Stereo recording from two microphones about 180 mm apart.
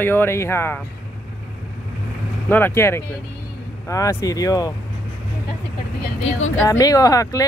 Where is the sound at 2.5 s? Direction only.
10° left (ahead or behind).